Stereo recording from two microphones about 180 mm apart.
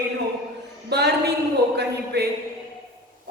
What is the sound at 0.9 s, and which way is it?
Speech, 65° right (ahead or behind).